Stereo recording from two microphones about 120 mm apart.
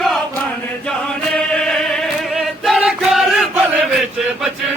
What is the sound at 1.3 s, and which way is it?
Choir, 5° left (ahead or behind).